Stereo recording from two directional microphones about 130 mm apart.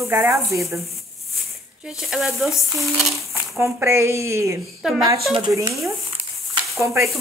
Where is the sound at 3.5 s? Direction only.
20° right (ahead or behind).